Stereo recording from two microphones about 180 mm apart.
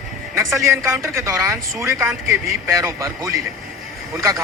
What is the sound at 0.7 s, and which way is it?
Speech, 15° right (ahead or behind).